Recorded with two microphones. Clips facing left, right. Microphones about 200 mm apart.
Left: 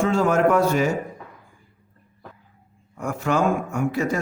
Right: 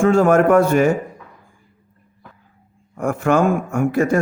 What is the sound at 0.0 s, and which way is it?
Speech, 50° right (ahead or behind).